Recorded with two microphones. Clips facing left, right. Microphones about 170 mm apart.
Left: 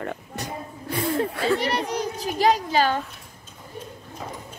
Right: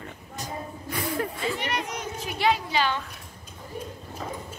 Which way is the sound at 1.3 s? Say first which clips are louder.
Left 7 dB; 70° left (ahead or behind).